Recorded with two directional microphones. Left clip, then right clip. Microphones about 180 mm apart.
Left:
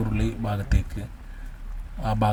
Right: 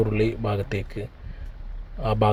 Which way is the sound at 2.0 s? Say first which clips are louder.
Right 3 dB; 5° right (ahead or behind).